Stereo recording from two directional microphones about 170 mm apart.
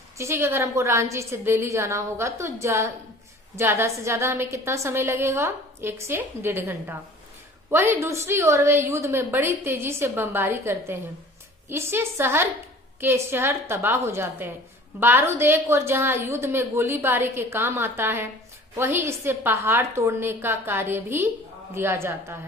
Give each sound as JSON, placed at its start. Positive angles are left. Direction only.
{"t": 0.2, "sound": "a woman's voice", "side_deg": -15}